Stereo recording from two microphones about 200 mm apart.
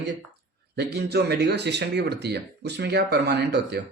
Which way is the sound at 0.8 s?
55° right (ahead or behind).